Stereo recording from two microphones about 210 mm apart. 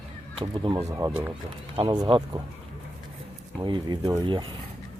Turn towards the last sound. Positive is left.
turn(degrees=-20)  # may be behind; listen again after turning